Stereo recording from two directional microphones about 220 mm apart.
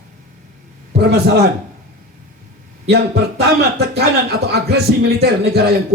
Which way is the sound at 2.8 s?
50° right (ahead or behind).